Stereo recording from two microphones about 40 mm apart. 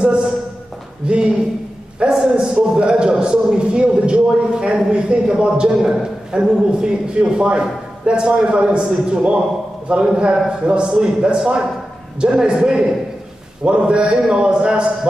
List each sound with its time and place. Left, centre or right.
0.0 s a man's voice: right